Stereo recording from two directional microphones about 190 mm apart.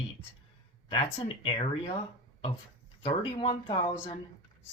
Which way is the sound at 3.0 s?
30° left (ahead or behind).